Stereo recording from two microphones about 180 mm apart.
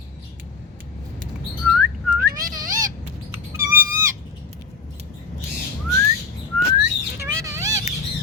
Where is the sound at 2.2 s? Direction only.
50° right (ahead or behind).